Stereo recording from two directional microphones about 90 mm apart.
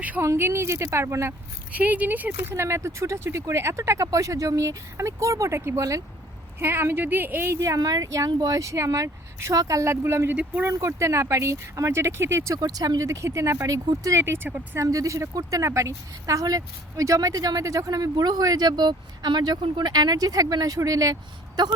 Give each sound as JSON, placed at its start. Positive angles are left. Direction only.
{"t": 0.2, "sound": "a woman's voice", "side_deg": -30}
{"t": 1.7, "sound": "a woman's voice", "side_deg": -20}
{"t": 7.6, "sound": "a woman's voice", "side_deg": -45}
{"t": 10.3, "sound": "speech", "side_deg": -15}
{"t": 10.7, "sound": "a woman's voice", "side_deg": -35}
{"t": 12.5, "sound": "speech", "side_deg": -45}
{"t": 13.1, "sound": "a woman's voice", "side_deg": -35}
{"t": 14.8, "sound": "a woman's voice", "side_deg": -40}